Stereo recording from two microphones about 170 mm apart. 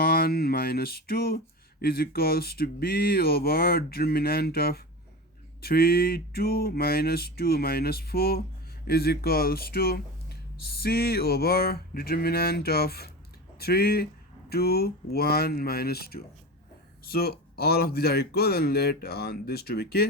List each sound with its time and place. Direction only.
0.0 s speech: 60° left (ahead or behind)